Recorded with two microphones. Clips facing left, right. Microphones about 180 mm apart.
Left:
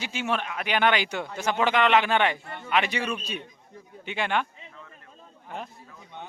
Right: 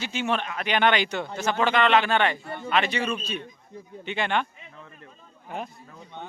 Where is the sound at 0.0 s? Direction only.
10° left (ahead or behind).